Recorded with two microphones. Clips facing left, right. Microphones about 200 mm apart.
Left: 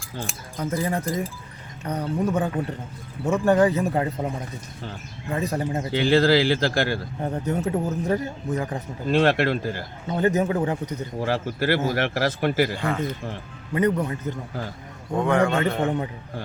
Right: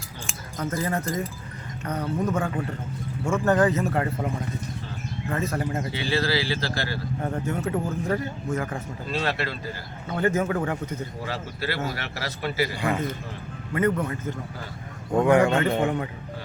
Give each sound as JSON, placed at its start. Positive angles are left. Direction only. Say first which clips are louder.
{"t": 0.6, "sound": "speech", "louder": "left 2 dB", "side_deg": 10}
{"t": 5.3, "sound": "speech", "louder": "left 2 dB", "side_deg": 15}
{"t": 6.0, "sound": "speech", "louder": "left 9 dB", "side_deg": 50}
{"t": 7.2, "sound": "speech", "louder": "left 1 dB", "side_deg": 20}
{"t": 9.0, "sound": "speech", "louder": "left 9 dB", "side_deg": 50}
{"t": 10.1, "sound": "speech", "louder": "left 2 dB", "side_deg": 20}
{"t": 11.2, "sound": "speech", "louder": "left 7 dB", "side_deg": 50}
{"t": 13.7, "sound": "speech", "louder": "left 2 dB", "side_deg": 20}
{"t": 15.2, "sound": "a man's voice", "louder": "right 2 dB", "side_deg": -15}